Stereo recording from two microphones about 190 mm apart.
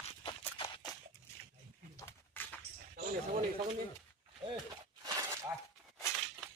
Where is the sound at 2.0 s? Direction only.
10° left (ahead or behind).